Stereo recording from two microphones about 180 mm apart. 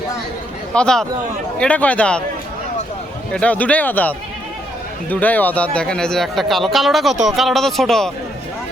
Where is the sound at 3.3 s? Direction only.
10° left (ahead or behind).